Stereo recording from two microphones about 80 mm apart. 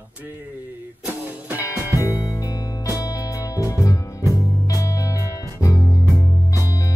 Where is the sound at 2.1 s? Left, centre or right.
Left.